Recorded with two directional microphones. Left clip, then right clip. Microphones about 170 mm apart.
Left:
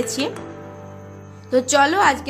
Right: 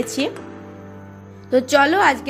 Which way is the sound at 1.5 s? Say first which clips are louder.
Right 1 dB; 15° right (ahead or behind).